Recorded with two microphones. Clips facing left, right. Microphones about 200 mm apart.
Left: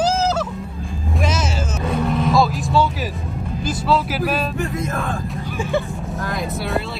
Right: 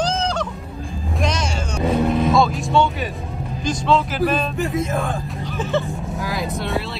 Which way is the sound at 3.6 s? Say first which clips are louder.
Right 1 dB; 5° left (ahead or behind).